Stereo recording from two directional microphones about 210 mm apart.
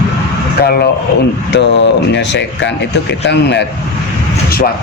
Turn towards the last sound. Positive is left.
turn(degrees=55)  # may be behind; listen again after turning